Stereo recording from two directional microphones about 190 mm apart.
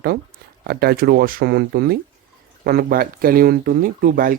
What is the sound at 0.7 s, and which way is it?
Speech, 55° right (ahead or behind).